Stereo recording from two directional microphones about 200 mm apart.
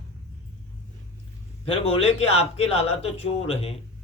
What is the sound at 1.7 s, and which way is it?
Speech, 30° left (ahead or behind).